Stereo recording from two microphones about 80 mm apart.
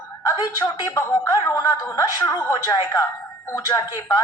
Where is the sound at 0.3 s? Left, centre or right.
Left.